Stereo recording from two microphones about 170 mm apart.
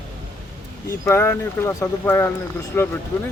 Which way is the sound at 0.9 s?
15° left (ahead or behind).